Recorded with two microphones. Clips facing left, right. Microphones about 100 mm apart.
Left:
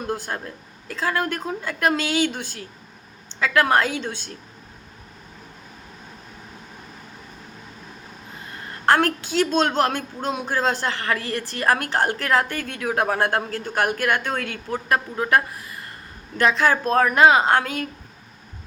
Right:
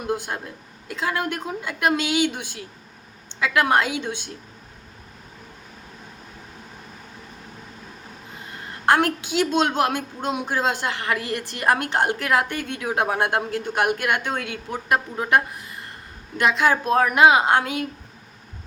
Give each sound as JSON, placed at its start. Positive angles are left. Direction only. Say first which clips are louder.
{"t": 0.1, "sound": "a woman's voice", "louder": "right 4 dB", "side_deg": -15}
{"t": 8.9, "sound": "a woman's voice", "louder": "even", "side_deg": -15}